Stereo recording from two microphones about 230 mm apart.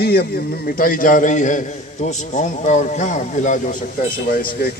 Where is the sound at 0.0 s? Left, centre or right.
Left.